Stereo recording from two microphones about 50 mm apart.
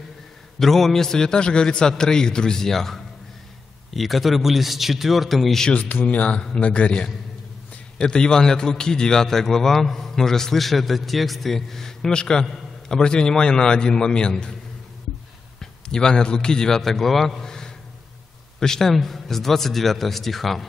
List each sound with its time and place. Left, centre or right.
0.6 s a man's voice: centre
6.0 s a man's voice: left
15.6 s a man's voice: centre